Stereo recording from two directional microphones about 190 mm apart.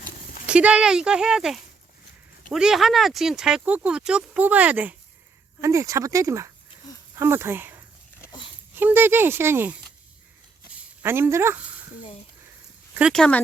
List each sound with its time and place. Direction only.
0.4 s speech: 5° right (ahead or behind)
8.2 s dog: 20° left (ahead or behind)
8.7 s speech: 10° right (ahead or behind)
11.0 s speech: 10° right (ahead or behind)
13.0 s speech: centre (ahead or behind)